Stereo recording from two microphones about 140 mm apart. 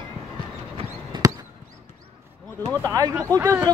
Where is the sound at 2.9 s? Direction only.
25° right (ahead or behind).